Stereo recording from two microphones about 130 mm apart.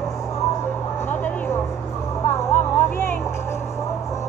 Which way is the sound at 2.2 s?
20° left (ahead or behind).